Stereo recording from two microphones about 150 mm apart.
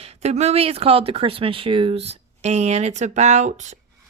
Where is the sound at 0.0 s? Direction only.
45° right (ahead or behind).